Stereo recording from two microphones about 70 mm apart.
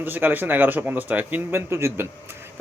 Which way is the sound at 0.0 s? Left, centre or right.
Right.